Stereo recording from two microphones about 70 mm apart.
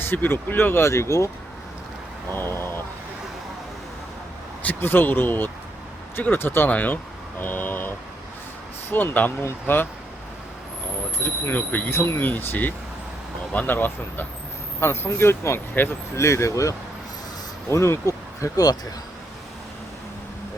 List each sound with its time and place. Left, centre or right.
0.0 s speech: left
2.3 s speech: left
4.6 s speech: left
11.2 s speech: left
11.9 s speech: left
16.1 s speech: left